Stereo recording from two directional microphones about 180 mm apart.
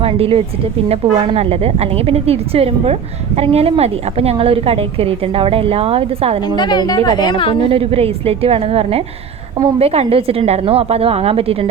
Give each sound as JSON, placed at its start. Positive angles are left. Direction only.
{"t": 0.0, "sound": "a woman's voice", "side_deg": -30}
{"t": 6.6, "sound": "a woman's voice", "side_deg": 25}
{"t": 7.7, "sound": "a woman's voice", "side_deg": -30}